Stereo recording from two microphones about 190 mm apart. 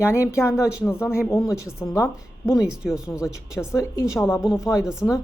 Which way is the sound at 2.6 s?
5° right (ahead or behind).